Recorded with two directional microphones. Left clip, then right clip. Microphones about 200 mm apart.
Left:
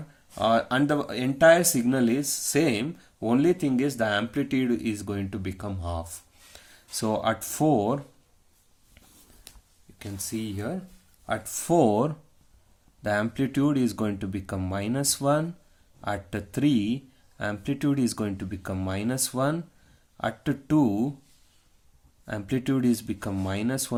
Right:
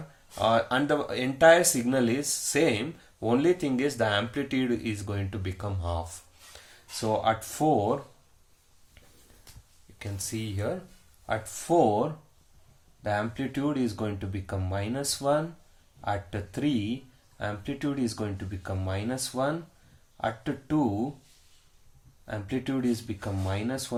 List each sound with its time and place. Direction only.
0.3 s speech: 35° left (ahead or behind)
10.0 s speech: 30° left (ahead or behind)
11.3 s speech: 45° left (ahead or behind)
22.3 s speech: 45° left (ahead or behind)